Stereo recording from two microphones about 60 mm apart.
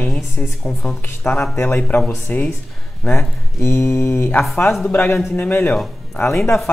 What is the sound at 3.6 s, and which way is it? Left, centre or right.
Speech, left.